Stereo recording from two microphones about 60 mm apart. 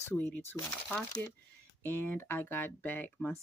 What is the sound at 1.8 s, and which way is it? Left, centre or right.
Speech, left.